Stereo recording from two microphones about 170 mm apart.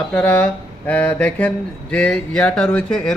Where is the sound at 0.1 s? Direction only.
10° left (ahead or behind).